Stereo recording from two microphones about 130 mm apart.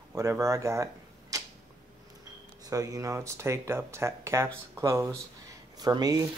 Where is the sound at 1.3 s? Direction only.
25° right (ahead or behind).